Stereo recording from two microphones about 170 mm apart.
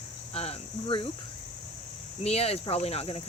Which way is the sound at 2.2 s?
35° left (ahead or behind).